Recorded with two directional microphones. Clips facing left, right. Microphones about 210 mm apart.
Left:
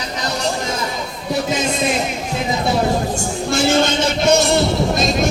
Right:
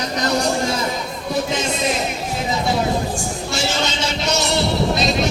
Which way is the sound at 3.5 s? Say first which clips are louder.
Left 8 dB; 55° left (ahead or behind).